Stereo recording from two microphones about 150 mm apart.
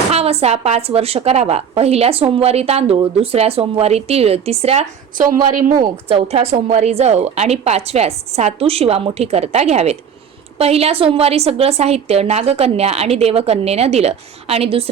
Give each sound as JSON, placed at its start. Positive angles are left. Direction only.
{"t": 0.1, "sound": "a woman's voice", "side_deg": -40}
{"t": 5.5, "sound": "speech", "side_deg": -60}
{"t": 6.1, "sound": "a woman's voice", "side_deg": -40}